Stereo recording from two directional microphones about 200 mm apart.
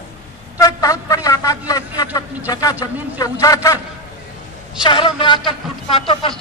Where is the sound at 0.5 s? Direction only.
15° left (ahead or behind).